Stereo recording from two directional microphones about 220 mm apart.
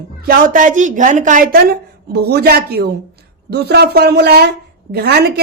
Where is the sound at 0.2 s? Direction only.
40° right (ahead or behind).